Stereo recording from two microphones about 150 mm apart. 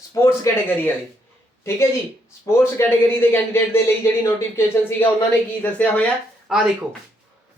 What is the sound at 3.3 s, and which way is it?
Speech, 15° left (ahead or behind).